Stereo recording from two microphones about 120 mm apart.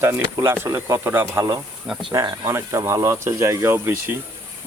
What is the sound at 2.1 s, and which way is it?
Speech, 30° right (ahead or behind).